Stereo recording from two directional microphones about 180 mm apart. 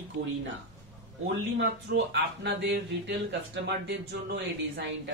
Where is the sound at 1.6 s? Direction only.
75° right (ahead or behind).